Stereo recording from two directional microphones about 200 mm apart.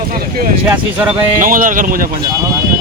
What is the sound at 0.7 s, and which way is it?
Speech, 10° right (ahead or behind).